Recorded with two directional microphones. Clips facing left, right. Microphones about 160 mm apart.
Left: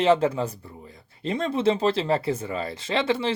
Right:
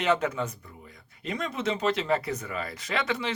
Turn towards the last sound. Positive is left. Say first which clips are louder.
# left 6 dB
turn(degrees=30)  # may be behind; listen again after turning